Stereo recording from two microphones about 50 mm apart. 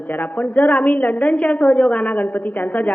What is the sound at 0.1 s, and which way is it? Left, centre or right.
A woman's voice, left.